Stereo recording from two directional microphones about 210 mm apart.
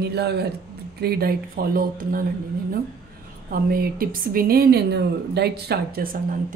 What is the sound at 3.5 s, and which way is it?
A woman's voice, 45° right (ahead or behind).